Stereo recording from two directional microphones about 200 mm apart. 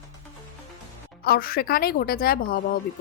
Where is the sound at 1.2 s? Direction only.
50° left (ahead or behind).